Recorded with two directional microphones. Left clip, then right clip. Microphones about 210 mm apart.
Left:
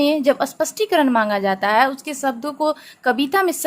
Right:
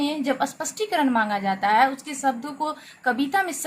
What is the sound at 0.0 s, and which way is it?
A woman's voice, 40° left (ahead or behind).